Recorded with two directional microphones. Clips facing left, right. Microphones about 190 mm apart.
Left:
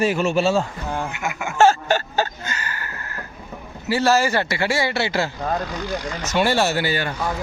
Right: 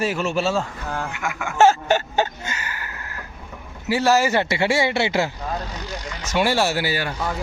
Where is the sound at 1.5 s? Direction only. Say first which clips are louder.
Even; 20° right (ahead or behind).